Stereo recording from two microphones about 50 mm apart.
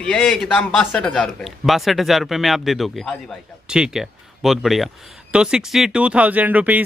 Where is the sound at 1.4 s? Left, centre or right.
Centre.